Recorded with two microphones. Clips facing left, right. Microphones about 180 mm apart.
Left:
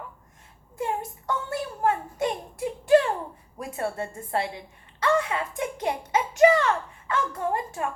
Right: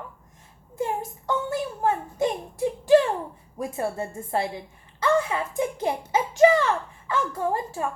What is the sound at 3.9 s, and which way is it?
Speech, 25° right (ahead or behind).